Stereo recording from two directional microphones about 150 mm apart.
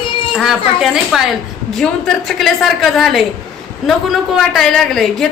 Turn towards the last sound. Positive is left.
turn(degrees=5)  # may be behind; listen again after turning